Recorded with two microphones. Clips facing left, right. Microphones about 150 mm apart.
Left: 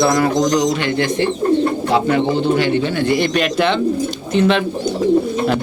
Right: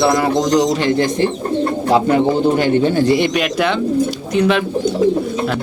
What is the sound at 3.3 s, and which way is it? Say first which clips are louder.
A man's voice: left 1 dB; 10° right (ahead or behind).